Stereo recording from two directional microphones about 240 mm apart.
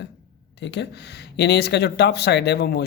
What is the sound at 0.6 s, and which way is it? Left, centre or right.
Speech, left.